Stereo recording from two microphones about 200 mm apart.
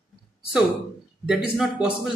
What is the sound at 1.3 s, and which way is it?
Speech, 5° right (ahead or behind).